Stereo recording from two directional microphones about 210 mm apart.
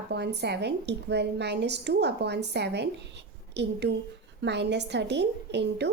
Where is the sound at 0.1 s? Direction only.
55° right (ahead or behind).